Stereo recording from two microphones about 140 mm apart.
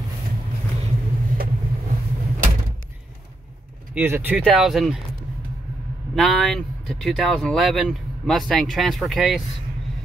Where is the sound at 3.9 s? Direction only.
15° right (ahead or behind).